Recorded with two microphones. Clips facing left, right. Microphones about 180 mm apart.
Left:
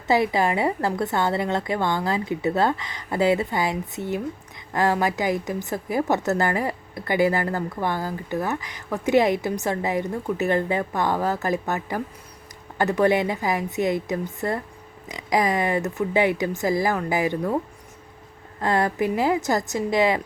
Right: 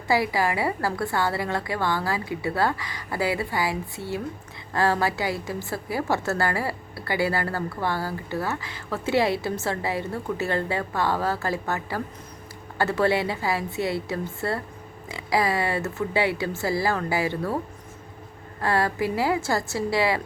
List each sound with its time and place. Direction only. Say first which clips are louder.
0.1 s a woman's voice: left 3 dB; 20° left (ahead or behind)
18.6 s a woman's voice: left 2 dB; 20° left (ahead or behind)